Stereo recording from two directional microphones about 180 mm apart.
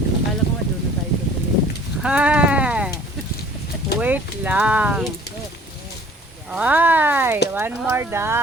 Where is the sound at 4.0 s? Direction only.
10° right (ahead or behind).